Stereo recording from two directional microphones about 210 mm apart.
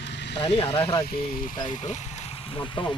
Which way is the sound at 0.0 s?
55° left (ahead or behind).